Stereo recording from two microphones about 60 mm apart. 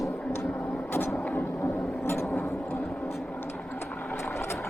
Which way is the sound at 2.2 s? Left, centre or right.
Left.